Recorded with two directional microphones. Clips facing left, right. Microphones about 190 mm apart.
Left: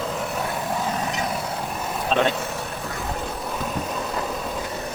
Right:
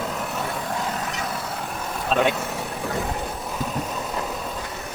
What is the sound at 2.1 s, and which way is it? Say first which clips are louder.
Speech: even; 5° right (ahead or behind).